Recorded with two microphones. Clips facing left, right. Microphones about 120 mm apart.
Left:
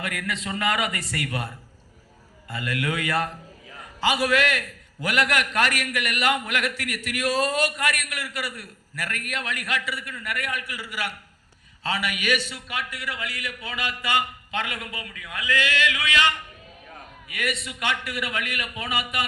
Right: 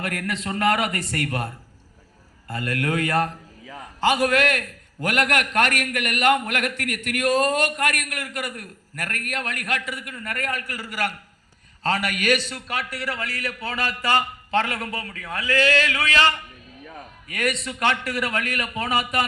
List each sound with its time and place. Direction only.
0.0 s a man's voice: 45° right (ahead or behind)
2.5 s a man's voice: 45° right (ahead or behind)